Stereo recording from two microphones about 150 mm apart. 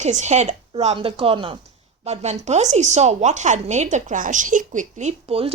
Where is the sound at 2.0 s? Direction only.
50° right (ahead or behind).